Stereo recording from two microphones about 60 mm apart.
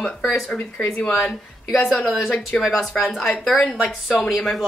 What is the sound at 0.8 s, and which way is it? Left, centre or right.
Speech, centre.